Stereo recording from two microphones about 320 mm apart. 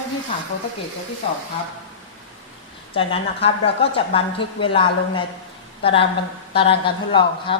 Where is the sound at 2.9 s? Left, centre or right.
Centre.